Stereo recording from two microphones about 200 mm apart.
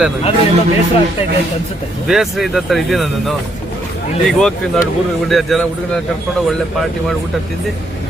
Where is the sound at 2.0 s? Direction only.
Centre (ahead or behind).